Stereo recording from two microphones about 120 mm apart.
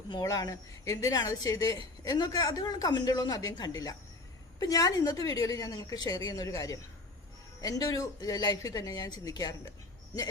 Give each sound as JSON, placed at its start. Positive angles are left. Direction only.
{"t": 0.1, "sound": "a woman's voice", "side_deg": 30}